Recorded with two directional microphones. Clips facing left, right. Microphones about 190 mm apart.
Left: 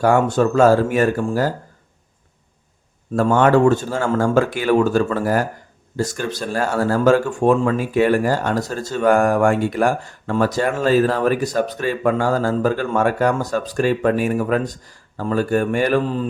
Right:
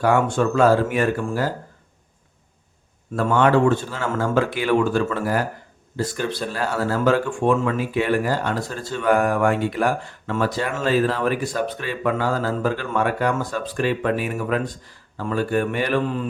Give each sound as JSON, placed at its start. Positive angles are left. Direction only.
{"t": 0.0, "sound": "speech", "side_deg": 40}
{"t": 3.2, "sound": "speech", "side_deg": 45}